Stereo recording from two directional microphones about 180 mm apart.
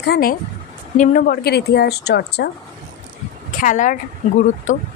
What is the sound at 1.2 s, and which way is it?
Speech, 60° left (ahead or behind).